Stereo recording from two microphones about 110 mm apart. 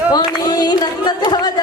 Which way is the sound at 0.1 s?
40° left (ahead or behind).